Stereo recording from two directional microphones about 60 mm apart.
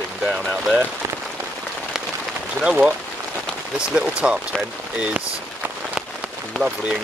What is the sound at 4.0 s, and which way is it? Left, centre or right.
Speech, centre.